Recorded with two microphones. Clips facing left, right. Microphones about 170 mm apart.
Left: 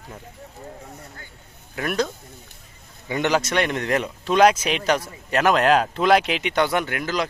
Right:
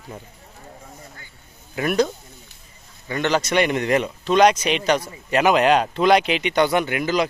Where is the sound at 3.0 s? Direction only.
15° left (ahead or behind).